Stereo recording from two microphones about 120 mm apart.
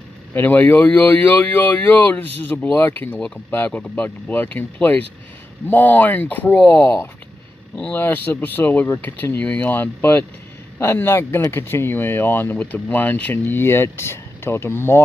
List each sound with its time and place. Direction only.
0.3 s speech: 15° left (ahead or behind)